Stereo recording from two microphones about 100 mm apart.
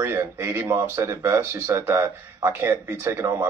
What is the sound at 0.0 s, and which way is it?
Speech, 30° right (ahead or behind).